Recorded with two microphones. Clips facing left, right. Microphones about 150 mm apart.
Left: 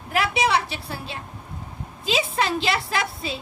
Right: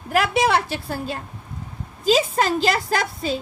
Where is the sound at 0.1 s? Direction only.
45° right (ahead or behind).